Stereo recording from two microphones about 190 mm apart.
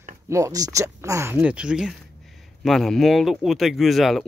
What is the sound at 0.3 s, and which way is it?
A man's voice, 15° right (ahead or behind).